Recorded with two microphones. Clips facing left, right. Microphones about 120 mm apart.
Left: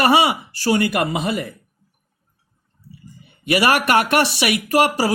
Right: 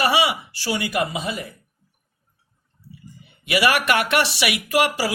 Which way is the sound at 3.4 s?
45° left (ahead or behind).